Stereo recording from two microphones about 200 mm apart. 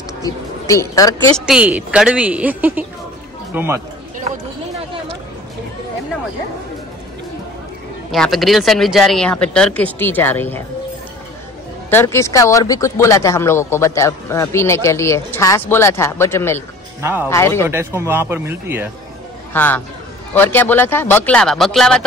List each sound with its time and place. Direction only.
0.2 s speech: 15° left (ahead or behind)
1.4 s a woman's voice: 5° right (ahead or behind)
8.1 s speech: centre (ahead or behind)
11.9 s speech: 10° left (ahead or behind)
17.0 s a woman's voice: 10° right (ahead or behind)
17.3 s speech: 15° left (ahead or behind)
17.6 s a woman's voice: 10° right (ahead or behind)
19.5 s speech: 10° left (ahead or behind)